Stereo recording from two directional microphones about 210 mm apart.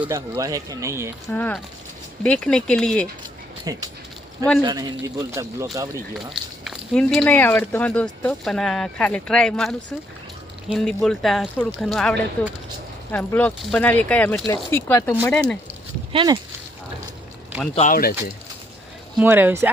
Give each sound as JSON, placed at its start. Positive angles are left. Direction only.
{"t": 0.0, "sound": "speech", "side_deg": -15}
{"t": 1.3, "sound": "speech", "side_deg": 10}
{"t": 3.7, "sound": "speech", "side_deg": -15}
{"t": 6.1, "sound": "speech", "side_deg": 0}
{"t": 16.1, "sound": "speech", "side_deg": -20}
{"t": 17.7, "sound": "speech", "side_deg": 40}
{"t": 19.1, "sound": "speech", "side_deg": -10}